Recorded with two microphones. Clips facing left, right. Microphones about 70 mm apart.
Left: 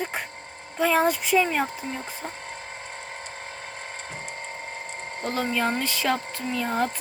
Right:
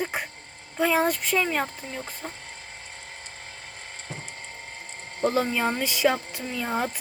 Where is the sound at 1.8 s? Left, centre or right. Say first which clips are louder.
Left 3 dB; left.